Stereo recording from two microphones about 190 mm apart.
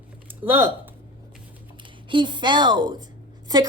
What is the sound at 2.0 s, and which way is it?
Speech, 25° right (ahead or behind).